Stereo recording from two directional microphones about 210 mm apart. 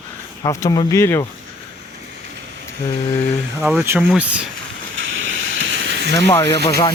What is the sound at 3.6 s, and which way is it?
Speech, 10° right (ahead or behind).